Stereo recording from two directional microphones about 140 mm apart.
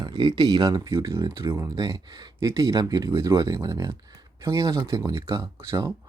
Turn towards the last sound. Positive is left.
turn(degrees=-20)  # may be behind; listen again after turning